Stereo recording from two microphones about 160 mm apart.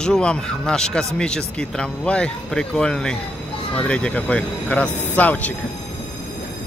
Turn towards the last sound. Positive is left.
turn(degrees=10)  # may be behind; listen again after turning